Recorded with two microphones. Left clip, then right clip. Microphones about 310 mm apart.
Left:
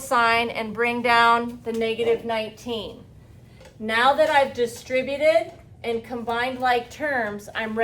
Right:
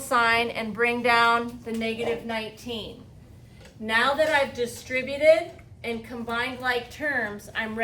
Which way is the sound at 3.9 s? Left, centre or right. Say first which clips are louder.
Left 3 dB; centre.